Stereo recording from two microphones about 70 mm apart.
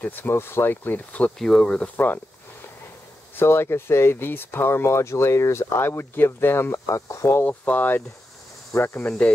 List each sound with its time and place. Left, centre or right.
0.0 s speech: left
1.4 s speech: centre
1.8 s speech: left
3.3 s speech: left
7.2 s speech: left
8.7 s speech: left